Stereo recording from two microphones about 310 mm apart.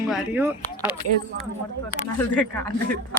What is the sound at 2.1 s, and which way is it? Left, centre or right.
Speech, centre.